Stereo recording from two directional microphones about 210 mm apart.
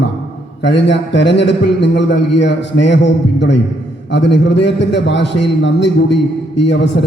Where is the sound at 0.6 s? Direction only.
55° left (ahead or behind).